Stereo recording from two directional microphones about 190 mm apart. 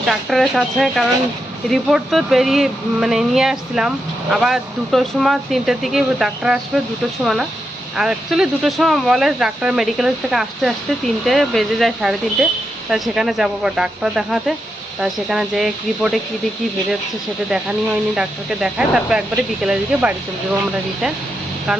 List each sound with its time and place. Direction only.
0.0 s speech: centre (ahead or behind)
7.9 s speech: 5° right (ahead or behind)
17.5 s speech: 5° right (ahead or behind)